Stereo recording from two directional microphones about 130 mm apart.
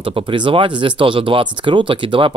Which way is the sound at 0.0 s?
40° right (ahead or behind).